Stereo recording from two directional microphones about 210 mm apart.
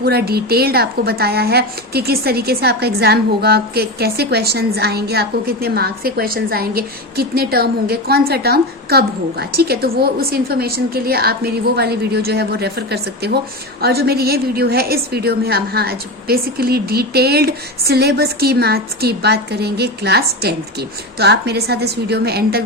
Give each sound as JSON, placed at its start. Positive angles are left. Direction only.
{"t": 0.0, "sound": "a woman's voice", "side_deg": -50}